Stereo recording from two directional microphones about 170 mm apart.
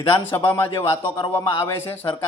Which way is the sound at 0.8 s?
30° left (ahead or behind).